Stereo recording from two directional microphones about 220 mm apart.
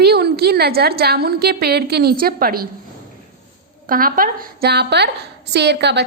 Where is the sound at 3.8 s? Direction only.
40° right (ahead or behind).